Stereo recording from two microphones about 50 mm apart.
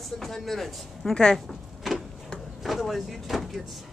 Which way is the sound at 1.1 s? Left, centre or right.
Centre.